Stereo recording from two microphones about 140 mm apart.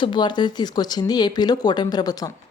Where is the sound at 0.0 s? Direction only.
35° left (ahead or behind).